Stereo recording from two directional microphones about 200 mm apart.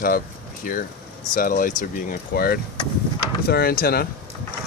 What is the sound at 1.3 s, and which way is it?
Speech, 45° left (ahead or behind).